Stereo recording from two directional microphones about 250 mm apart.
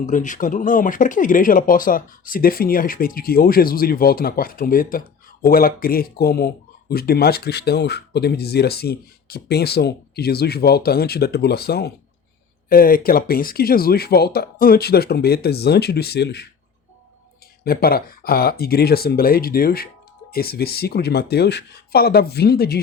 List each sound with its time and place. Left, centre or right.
0.0 s speech: left
17.6 s speech: left